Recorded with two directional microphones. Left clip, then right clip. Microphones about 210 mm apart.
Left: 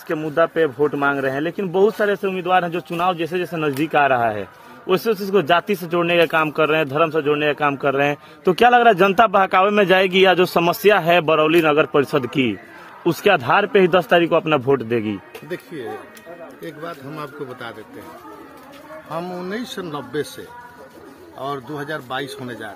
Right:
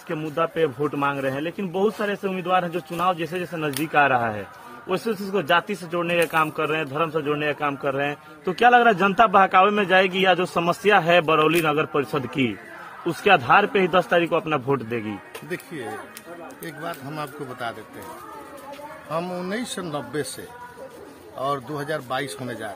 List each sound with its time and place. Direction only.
0.1 s a man's voice: 50° left (ahead or behind)
15.5 s a man's voice: centre (ahead or behind)
19.1 s a man's voice: centre (ahead or behind)
21.4 s a man's voice: 5° right (ahead or behind)